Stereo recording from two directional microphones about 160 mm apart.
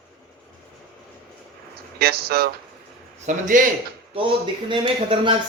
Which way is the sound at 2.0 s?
75° right (ahead or behind).